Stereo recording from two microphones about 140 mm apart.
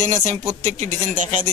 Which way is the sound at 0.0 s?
60° right (ahead or behind).